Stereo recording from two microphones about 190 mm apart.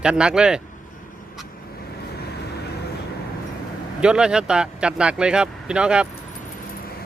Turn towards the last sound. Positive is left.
turn(degrees=-5)  # may be behind; listen again after turning